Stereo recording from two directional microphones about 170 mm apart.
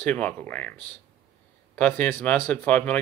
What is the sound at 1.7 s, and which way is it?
Speech, 10° left (ahead or behind).